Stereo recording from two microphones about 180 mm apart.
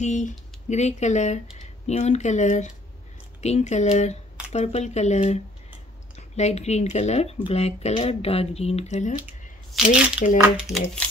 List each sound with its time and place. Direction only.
0.0 s speech: 40° left (ahead or behind)
10.3 s speech: 5° right (ahead or behind)